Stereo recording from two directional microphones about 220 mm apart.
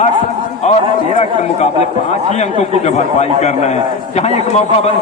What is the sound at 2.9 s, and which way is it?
A man's voice, 30° left (ahead or behind).